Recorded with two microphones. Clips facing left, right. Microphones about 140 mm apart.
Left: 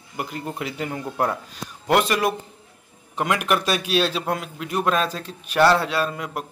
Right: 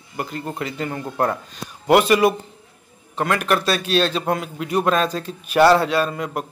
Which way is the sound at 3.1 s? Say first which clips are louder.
Right 2 dB; 15° left (ahead or behind).